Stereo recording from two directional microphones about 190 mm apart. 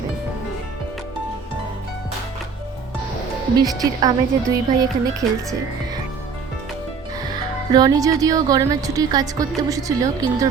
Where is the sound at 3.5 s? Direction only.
20° right (ahead or behind).